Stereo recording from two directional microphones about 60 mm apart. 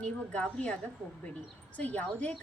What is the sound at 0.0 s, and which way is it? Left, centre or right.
Speech, centre.